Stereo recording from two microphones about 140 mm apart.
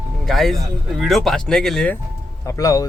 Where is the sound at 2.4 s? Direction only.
25° left (ahead or behind).